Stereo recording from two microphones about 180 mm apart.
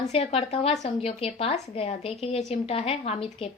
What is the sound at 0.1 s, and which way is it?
Speech, 35° left (ahead or behind).